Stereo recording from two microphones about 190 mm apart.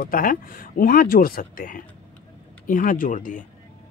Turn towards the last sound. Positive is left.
turn(degrees=45)  # may be behind; listen again after turning